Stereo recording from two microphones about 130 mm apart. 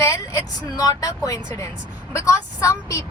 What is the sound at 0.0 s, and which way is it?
Vehicle, 20° left (ahead or behind).